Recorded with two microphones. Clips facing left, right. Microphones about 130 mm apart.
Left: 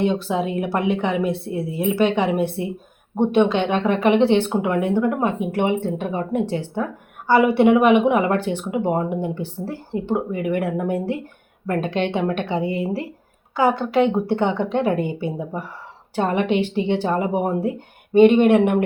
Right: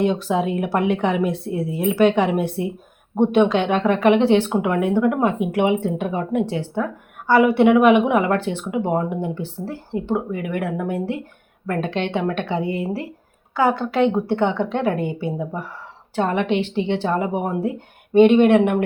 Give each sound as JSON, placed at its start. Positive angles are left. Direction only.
{"t": 0.0, "sound": "speech", "side_deg": 0}